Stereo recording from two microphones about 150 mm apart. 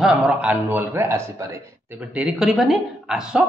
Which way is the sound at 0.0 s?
5° right (ahead or behind).